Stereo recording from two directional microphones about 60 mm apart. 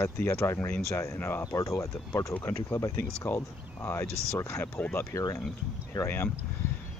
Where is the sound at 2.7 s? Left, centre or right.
Left.